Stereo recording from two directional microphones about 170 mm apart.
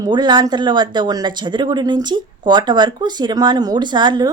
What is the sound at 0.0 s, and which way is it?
Speech, 25° right (ahead or behind).